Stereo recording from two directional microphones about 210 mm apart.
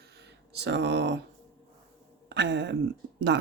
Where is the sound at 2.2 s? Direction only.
55° right (ahead or behind).